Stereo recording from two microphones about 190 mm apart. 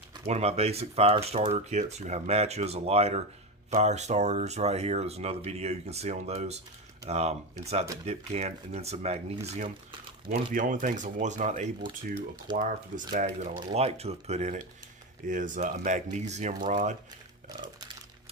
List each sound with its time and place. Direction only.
0.3 s speech: 35° right (ahead or behind)
10.2 s speech: 45° right (ahead or behind)
13.6 s speech: 30° right (ahead or behind)
17.6 s a sound: 25° right (ahead or behind)